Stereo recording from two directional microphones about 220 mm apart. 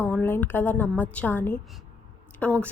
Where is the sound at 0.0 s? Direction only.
10° left (ahead or behind).